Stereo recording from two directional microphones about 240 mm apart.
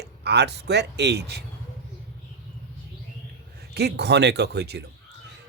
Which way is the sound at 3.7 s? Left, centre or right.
Right.